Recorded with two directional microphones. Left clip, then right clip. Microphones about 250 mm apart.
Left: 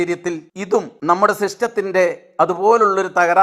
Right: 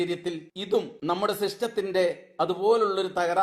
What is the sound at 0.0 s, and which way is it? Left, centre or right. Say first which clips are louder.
A man's voice: left 8 dB; left.